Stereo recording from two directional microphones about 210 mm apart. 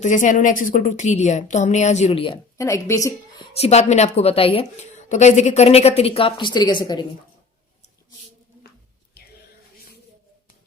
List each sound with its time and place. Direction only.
0.0 s a woman's voice: 35° left (ahead or behind); by 3.4 s 15° left (ahead or behind)
3.6 s a woman's voice: 30° left (ahead or behind)